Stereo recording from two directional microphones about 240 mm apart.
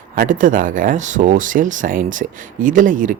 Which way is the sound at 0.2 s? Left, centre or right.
Right.